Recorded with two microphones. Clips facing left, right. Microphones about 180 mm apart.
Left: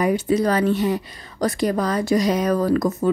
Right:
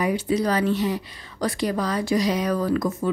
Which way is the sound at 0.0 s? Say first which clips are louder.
Left 4 dB; 45° left (ahead or behind).